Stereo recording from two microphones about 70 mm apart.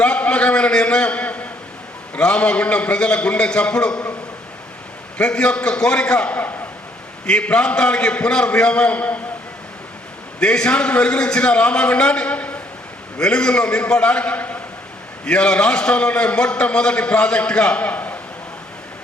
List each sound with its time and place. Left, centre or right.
0.0 s a man's voice: centre
5.1 s a man's voice: centre
10.4 s a man's voice: centre